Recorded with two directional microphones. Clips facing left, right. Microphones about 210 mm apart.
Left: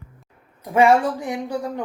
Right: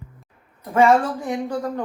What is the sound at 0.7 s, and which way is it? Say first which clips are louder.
Speech: even; 15° left (ahead or behind).